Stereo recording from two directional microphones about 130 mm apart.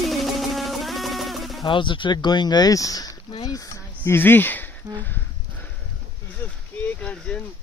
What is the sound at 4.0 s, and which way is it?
Speech, 15° left (ahead or behind).